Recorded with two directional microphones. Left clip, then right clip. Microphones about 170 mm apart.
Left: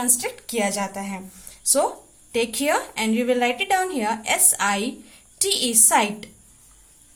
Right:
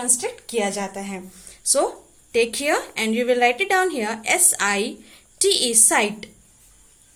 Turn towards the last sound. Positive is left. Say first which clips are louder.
# even
turn(degrees=-20)  # may be behind; listen again after turning